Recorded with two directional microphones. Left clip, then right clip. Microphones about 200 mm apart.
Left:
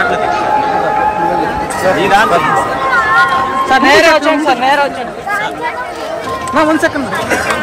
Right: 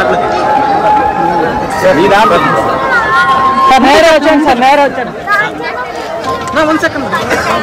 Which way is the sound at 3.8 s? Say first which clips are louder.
Right 2 dB; 40° right (ahead or behind).